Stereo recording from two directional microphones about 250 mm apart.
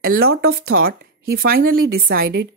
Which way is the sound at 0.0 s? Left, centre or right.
Right.